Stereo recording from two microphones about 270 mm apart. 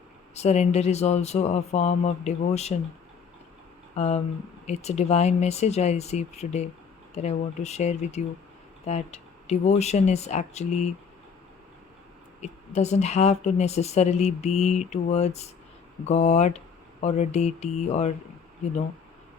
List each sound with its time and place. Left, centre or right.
0.3 s a woman's voice: left
3.9 s a woman's voice: left
12.4 s a woman's voice: left